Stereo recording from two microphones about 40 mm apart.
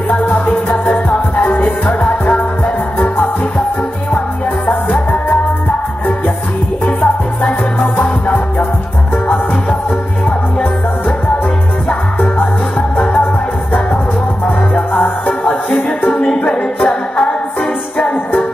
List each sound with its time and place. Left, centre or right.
0.1 s music: left
4.8 s music: left
6.8 s music: left
8.0 s music: left
11.9 s music: left
16.3 s music: left
17.9 s music: left